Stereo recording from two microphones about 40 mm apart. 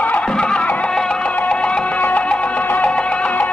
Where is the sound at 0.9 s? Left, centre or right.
Centre.